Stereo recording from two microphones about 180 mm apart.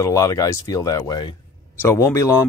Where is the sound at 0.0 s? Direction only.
20° left (ahead or behind).